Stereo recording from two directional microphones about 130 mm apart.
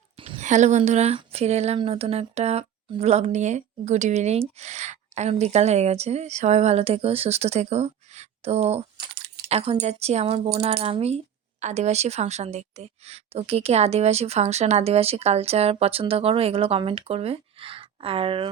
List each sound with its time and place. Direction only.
0.2 s a woman's voice: 60° right (ahead or behind); by 18.4 s 45° right (ahead or behind)